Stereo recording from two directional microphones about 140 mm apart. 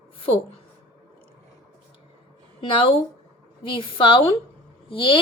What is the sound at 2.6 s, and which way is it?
A woman's voice, 35° left (ahead or behind).